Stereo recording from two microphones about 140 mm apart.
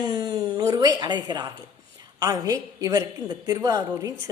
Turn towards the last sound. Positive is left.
turn(degrees=-25)  # may be behind; listen again after turning